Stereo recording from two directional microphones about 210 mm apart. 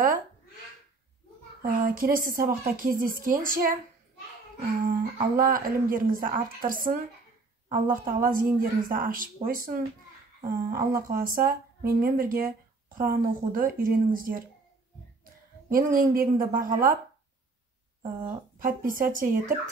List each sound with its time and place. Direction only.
1.6 s speech: 45° right (ahead or behind)
4.8 s speech: 40° right (ahead or behind)
15.7 s speech: 40° right (ahead or behind)
18.0 s speech: 40° right (ahead or behind)